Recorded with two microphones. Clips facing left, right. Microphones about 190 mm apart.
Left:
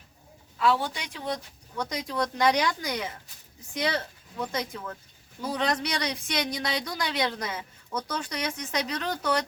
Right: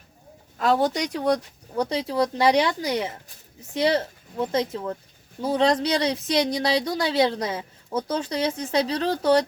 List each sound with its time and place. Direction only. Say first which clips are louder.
0.6 s a woman's voice: right 5 dB; 40° right (ahead or behind)